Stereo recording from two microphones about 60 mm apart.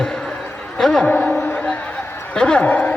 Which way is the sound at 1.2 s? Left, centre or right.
Centre.